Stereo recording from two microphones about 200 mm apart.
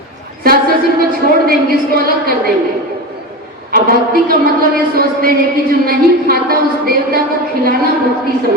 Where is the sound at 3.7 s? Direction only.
45° right (ahead or behind).